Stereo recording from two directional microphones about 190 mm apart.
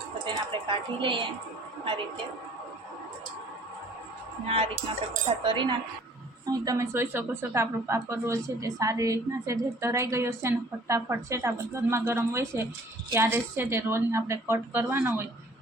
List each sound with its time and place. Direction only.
0.3 s a woman's voice: 25° right (ahead or behind)
4.4 s a woman's voice: 30° right (ahead or behind); by 15.3 s 15° right (ahead or behind)